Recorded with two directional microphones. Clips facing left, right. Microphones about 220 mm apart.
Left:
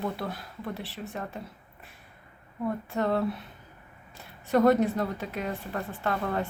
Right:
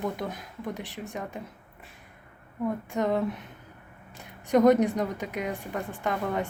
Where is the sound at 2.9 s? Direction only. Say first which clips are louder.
Even; 15° right (ahead or behind).